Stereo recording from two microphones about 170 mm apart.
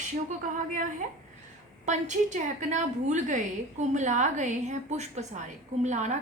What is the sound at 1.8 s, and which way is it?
A woman's voice, 45° right (ahead or behind).